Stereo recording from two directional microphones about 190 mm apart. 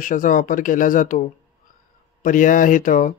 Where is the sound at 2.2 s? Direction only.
45° left (ahead or behind).